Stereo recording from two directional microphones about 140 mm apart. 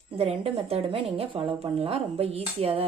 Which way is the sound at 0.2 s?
45° right (ahead or behind).